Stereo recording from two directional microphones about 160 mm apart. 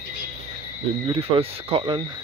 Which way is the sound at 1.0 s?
35° right (ahead or behind).